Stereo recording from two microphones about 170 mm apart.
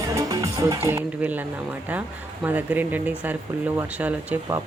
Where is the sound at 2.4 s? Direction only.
10° right (ahead or behind).